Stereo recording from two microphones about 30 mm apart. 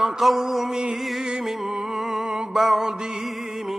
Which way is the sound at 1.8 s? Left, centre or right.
Centre.